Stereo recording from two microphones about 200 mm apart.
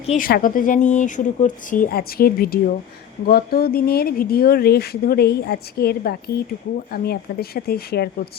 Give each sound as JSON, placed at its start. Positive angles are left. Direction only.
{"t": 0.2, "sound": "speech", "side_deg": 45}